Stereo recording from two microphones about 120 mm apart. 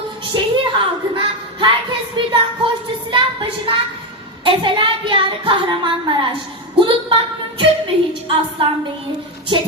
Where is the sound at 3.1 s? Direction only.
40° right (ahead or behind).